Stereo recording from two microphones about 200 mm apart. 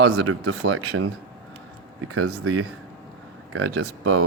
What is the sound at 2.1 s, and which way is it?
Speech, 90° right.